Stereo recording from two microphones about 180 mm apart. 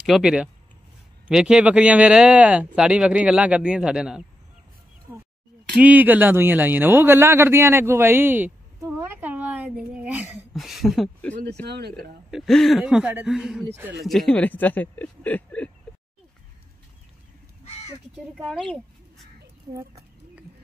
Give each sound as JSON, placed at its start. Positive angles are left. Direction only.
{"t": 0.0, "sound": "a man's voice", "side_deg": 0}
{"t": 5.8, "sound": "speech", "side_deg": -10}
{"t": 11.6, "sound": "speech", "side_deg": -65}
{"t": 12.3, "sound": "a man's voice", "side_deg": 0}
{"t": 18.1, "sound": "speech", "side_deg": 5}